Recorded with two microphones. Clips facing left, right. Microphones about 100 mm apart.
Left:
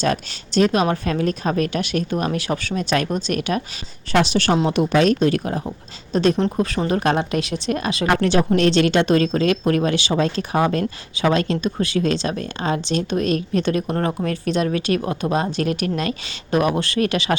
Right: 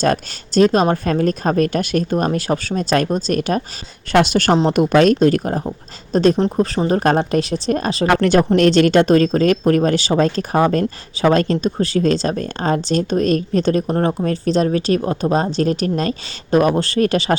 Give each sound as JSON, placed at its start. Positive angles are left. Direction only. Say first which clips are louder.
{"t": 0.0, "sound": "speech", "louder": "right 4 dB", "side_deg": -40}
{"t": 4.1, "sound": "speech", "louder": "right 4 dB", "side_deg": -55}
{"t": 8.2, "sound": "speech", "louder": "right 4 dB", "side_deg": -50}